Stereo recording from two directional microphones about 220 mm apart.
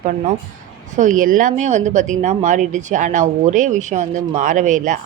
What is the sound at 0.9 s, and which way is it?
Speech, 35° right (ahead or behind).